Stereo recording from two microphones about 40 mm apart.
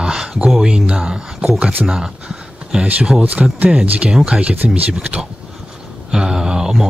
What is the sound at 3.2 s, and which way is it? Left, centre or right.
Speech, right.